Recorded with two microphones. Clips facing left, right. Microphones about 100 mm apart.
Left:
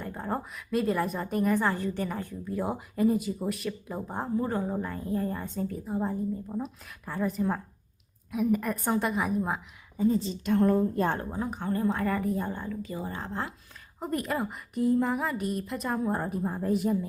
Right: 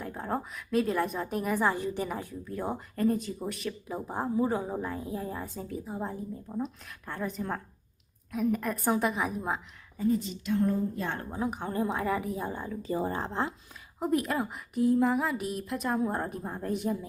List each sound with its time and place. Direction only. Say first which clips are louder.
0.0 s speech: even; centre (ahead or behind)
2.4 s speech: left 3 dB; 5° left (ahead or behind)
10.0 s a woman's voice: left 2 dB; 30° left (ahead or behind)
10.4 s a woman's voice: left 6 dB; 60° left (ahead or behind)
10.9 s a woman's voice: left 7 dB; 45° left (ahead or behind)
11.3 s a woman's voice: left 1 dB; 5° right (ahead or behind)
12.8 s a woman's voice: right 5 dB; 35° right (ahead or behind)
14.0 s speech: right 2 dB; centre (ahead or behind)